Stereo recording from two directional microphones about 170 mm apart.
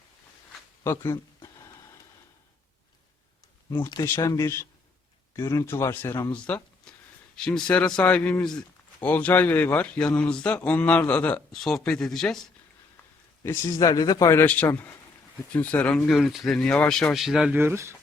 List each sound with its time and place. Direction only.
0.8 s speech: 15° left (ahead or behind)
3.8 s speech: 25° left (ahead or behind); by 12.4 s 5° left (ahead or behind)
13.4 s speech: 15° left (ahead or behind); by 17.6 s 5° right (ahead or behind)
17.6 s speech: 15° right (ahead or behind)